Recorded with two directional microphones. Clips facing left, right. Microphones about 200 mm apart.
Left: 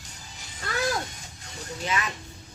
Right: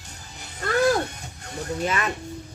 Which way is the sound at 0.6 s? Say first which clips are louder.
Right 8 dB; 60° right (ahead or behind).